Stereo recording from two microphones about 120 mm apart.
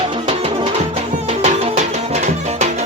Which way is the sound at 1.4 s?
70° right (ahead or behind).